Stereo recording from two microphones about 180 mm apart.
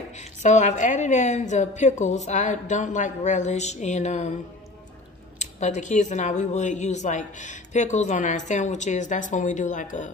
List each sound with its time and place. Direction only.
0.1 s speech: 40° left (ahead or behind)
5.4 s speech: 40° left (ahead or behind)